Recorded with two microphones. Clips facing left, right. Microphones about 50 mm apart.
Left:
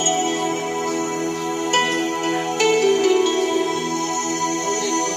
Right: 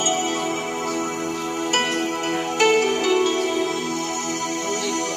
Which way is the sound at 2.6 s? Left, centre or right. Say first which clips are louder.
Left 2 dB; right.